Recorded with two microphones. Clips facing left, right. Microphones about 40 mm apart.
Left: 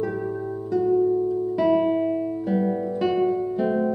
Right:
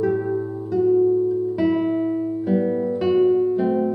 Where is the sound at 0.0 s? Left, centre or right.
Centre.